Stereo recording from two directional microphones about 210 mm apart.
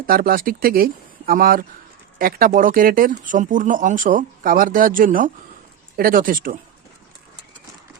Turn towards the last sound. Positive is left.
turn(degrees=-40)  # may be behind; listen again after turning